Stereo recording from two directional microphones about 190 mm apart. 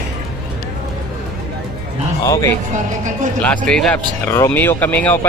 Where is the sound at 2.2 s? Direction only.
15° left (ahead or behind).